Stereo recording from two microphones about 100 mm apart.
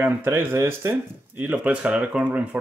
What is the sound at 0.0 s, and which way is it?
Speech, 20° right (ahead or behind).